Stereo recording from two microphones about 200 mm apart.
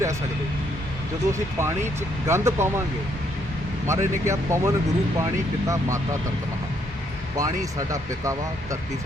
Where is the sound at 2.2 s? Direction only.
15° right (ahead or behind).